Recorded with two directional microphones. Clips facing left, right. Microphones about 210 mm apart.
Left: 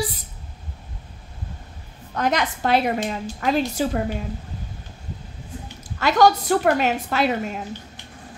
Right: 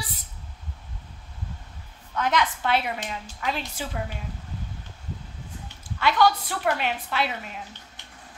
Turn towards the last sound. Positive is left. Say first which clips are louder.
# left 7 dB
turn(degrees=45)  # may be behind; listen again after turning